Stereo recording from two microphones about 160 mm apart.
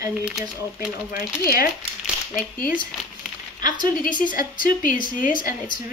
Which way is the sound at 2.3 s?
60° left (ahead or behind).